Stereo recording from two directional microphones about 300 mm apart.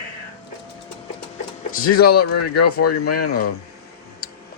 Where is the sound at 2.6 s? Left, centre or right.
Left.